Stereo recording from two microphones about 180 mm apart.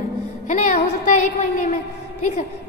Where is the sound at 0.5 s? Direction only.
45° left (ahead or behind).